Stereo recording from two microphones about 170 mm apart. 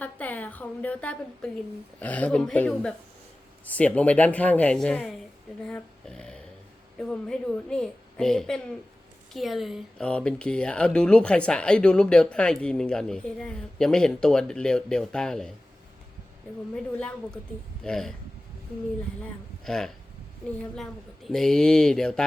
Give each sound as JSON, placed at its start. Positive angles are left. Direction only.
{"t": 0.0, "sound": "a woman's voice", "side_deg": 10}
{"t": 16.7, "sound": "speech", "side_deg": 5}
{"t": 19.6, "sound": "speech", "side_deg": 5}